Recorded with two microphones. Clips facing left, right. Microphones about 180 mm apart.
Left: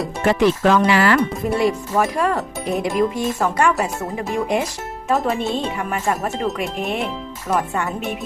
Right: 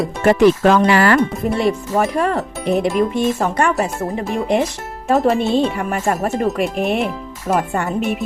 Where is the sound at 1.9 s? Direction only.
25° right (ahead or behind).